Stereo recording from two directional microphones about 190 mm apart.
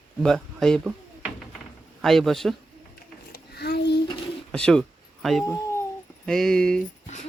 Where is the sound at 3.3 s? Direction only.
60° left (ahead or behind).